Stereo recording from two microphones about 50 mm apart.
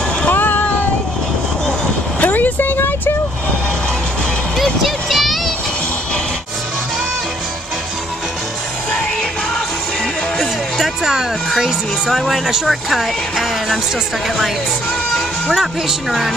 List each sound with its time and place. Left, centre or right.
0.3 s a sound: left
2.1 s vehicle: left
4.8 s vehicle: centre
10.4 s music: centre
12.4 s speech: centre
15.5 s speech: centre